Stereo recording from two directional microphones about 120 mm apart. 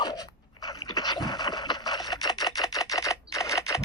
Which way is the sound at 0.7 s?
35° left (ahead or behind).